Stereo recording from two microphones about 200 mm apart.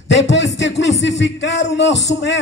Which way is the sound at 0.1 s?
65° left (ahead or behind).